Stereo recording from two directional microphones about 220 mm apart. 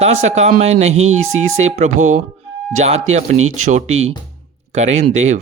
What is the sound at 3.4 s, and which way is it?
Speech, 70° right (ahead or behind).